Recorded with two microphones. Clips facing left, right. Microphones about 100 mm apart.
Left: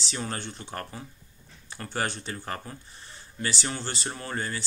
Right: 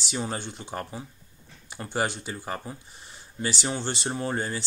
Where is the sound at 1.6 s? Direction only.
15° right (ahead or behind).